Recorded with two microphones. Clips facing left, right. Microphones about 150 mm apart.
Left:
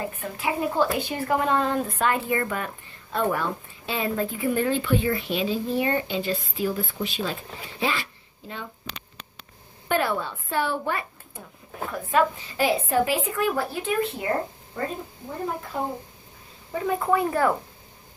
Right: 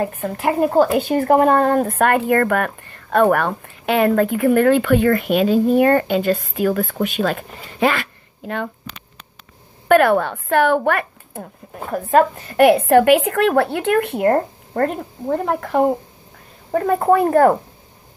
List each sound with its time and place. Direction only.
0.0 s speech: 55° right (ahead or behind)
9.8 s a woman's voice: 65° right (ahead or behind)
16.7 s speech: 55° right (ahead or behind)